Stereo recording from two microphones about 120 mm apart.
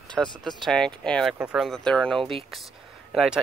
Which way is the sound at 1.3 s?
5° right (ahead or behind).